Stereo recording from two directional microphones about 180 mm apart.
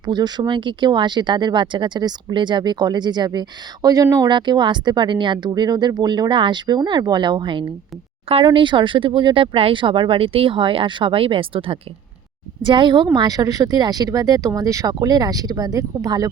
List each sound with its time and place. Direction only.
0.0 s a woman's voice: 25° right (ahead or behind)